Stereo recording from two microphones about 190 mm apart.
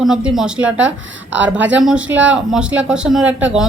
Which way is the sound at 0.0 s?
5° right (ahead or behind).